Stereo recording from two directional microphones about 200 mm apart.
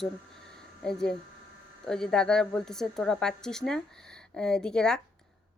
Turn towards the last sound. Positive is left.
turn(degrees=5)  # may be behind; listen again after turning